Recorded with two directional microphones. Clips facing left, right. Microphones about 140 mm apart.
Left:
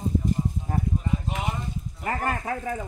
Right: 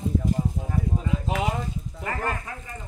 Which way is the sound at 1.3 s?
90° right.